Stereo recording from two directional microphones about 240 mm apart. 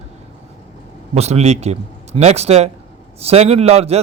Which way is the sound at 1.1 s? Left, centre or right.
Right.